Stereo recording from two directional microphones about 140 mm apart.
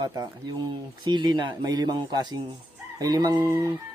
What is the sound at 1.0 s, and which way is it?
Speech, 30° right (ahead or behind).